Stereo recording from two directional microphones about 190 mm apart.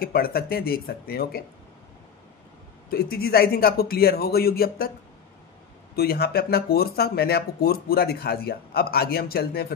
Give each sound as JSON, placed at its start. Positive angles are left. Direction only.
{"t": 0.0, "sound": "a man's voice", "side_deg": 55}
{"t": 2.9, "sound": "a man's voice", "side_deg": 55}
{"t": 5.9, "sound": "speech", "side_deg": 55}